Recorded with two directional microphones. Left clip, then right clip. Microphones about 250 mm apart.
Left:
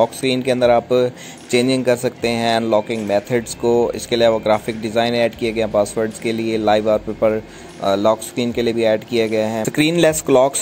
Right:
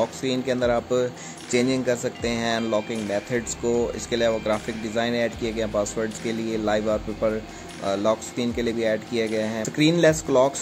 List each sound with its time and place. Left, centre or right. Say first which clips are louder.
0.0 s speech: left 8 dB; centre